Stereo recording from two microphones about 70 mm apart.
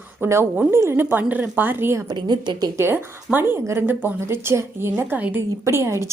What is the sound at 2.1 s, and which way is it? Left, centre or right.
Speech, right.